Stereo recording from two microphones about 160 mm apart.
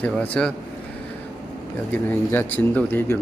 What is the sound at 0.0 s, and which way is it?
Speech, 5° left (ahead or behind).